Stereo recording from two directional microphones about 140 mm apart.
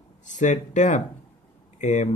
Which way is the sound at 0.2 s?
60° left (ahead or behind).